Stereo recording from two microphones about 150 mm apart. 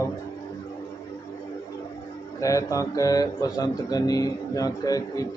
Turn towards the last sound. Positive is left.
turn(degrees=25)  # may be behind; listen again after turning